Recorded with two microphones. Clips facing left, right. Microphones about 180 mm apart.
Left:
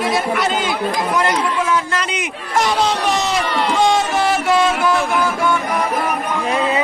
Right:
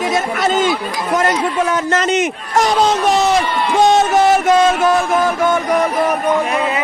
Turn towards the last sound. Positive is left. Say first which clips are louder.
# right 4 dB
turn(degrees=-45)  # may be behind; listen again after turning